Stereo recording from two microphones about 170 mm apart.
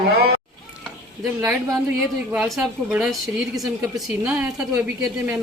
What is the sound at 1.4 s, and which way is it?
Speech, 15° right (ahead or behind).